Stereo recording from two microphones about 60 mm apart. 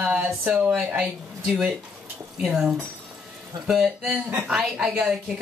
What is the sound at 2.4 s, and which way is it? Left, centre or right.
A woman's voice, centre.